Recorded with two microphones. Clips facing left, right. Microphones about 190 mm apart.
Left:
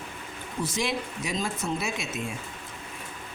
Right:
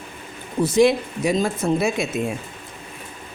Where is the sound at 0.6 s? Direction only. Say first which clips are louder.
Right 13 dB; 60° right (ahead or behind).